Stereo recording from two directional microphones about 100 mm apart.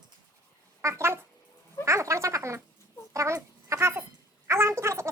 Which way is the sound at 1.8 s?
30° right (ahead or behind).